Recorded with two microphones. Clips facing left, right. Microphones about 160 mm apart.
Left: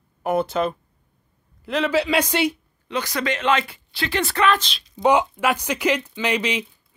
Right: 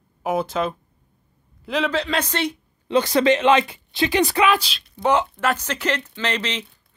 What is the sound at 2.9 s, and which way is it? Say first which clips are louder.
Speech: right 8 dB; 30° right (ahead or behind).